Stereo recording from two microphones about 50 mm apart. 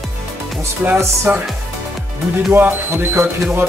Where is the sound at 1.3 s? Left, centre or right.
Right.